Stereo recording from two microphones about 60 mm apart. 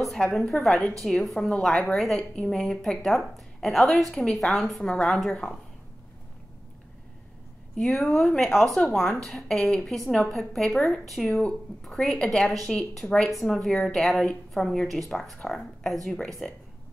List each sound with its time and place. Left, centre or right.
0.0 s a woman's voice: centre
1.7 s a woman's voice: centre
2.0 s a woman's voice: centre
7.7 s a woman's voice: centre
12.6 s a woman's voice: centre
16.4 s a woman's voice: centre